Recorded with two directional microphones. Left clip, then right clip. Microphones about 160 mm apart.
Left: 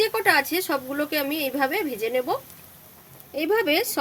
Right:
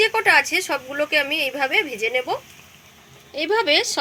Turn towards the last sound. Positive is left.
turn(degrees=90)